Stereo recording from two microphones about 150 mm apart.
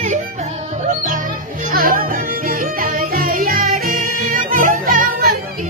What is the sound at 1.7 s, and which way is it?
Music, 70° right (ahead or behind).